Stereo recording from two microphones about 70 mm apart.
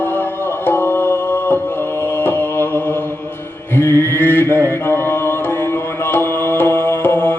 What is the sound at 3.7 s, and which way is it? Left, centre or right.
Mantra, left.